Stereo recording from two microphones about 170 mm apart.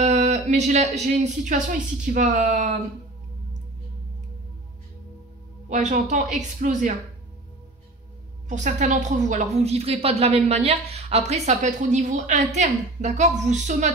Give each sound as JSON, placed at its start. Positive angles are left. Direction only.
{"t": 0.0, "sound": "speech", "side_deg": -40}
{"t": 5.7, "sound": "speech", "side_deg": -45}
{"t": 8.5, "sound": "a woman's voice", "side_deg": -45}